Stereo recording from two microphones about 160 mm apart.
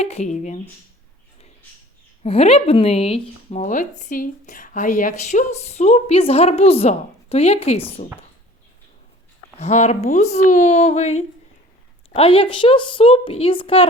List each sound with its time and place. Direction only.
0.0 s speech: 40° left (ahead or behind)
2.2 s speech: 40° left (ahead or behind)
9.6 s speech: 45° left (ahead or behind)